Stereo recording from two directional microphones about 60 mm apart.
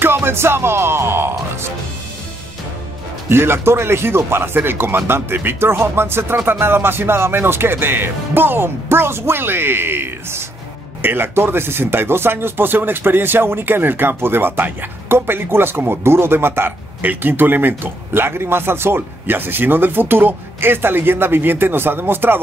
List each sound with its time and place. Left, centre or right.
0.0 s speech: right
3.3 s speech: right